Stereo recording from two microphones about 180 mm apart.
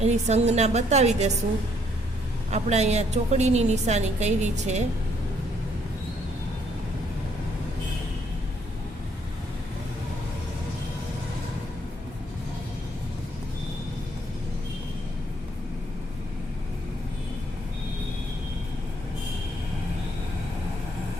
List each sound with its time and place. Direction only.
0.0 s a woman's voice: 40° right (ahead or behind)
2.5 s a woman's voice: 40° right (ahead or behind)